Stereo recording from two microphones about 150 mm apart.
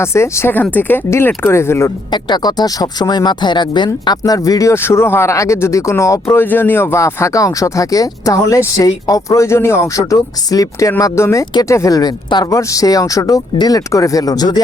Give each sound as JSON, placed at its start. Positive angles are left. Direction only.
{"t": 0.0, "sound": "speech", "side_deg": 15}
{"t": 2.1, "sound": "speech", "side_deg": 30}